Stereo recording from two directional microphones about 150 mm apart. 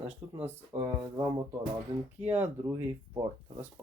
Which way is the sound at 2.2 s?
15° right (ahead or behind).